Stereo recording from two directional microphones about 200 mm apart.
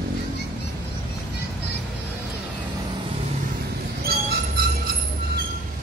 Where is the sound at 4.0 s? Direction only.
50° right (ahead or behind).